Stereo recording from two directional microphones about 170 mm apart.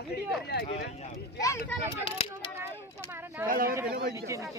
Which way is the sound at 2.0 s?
30° left (ahead or behind).